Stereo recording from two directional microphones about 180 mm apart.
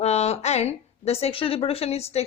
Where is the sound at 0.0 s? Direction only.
35° left (ahead or behind).